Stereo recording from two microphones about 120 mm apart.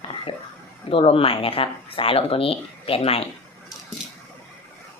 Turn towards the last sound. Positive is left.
turn(degrees=55)  # may be behind; listen again after turning